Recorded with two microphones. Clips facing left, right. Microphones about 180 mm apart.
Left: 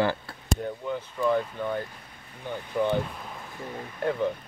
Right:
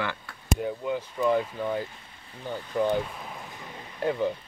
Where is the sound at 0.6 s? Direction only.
10° right (ahead or behind).